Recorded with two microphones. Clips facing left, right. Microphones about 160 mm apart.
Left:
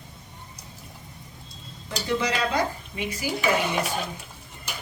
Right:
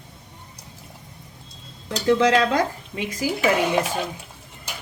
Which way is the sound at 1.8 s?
90° right.